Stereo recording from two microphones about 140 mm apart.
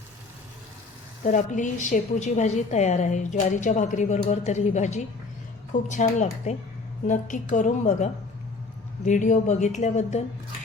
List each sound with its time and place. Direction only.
1.2 s a woman's voice: 65° left (ahead or behind)